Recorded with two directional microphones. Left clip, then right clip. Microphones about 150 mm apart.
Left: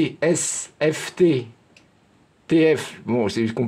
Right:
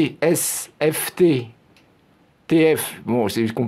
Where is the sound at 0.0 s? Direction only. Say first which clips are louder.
Right 1 dB; 35° right (ahead or behind).